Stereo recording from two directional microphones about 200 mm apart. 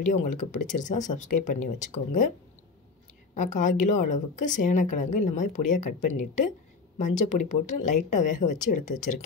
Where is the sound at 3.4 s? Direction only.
40° left (ahead or behind).